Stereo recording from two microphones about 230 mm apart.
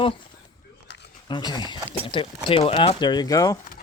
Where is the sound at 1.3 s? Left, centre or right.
Centre.